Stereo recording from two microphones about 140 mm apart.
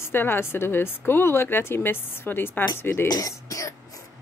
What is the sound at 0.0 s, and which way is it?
Speech, 15° left (ahead or behind).